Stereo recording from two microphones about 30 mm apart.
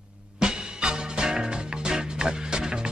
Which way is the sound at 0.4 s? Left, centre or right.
Right.